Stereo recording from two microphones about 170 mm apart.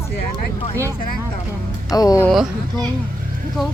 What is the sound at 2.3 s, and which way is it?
Speech, centre (ahead or behind).